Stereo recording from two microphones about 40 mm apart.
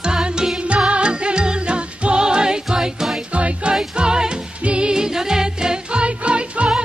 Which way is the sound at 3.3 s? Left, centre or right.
Right.